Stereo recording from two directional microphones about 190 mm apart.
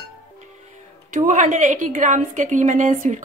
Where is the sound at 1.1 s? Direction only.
40° right (ahead or behind).